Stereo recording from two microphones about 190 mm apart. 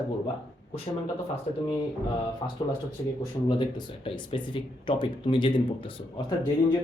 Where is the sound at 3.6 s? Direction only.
25° left (ahead or behind).